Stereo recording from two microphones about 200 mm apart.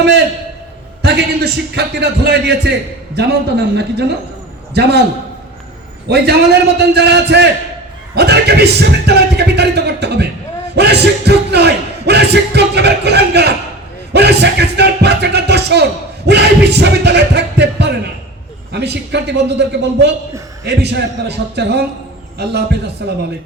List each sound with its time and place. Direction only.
1.0 s music: 55° right (ahead or behind)
6.1 s music: 55° right (ahead or behind)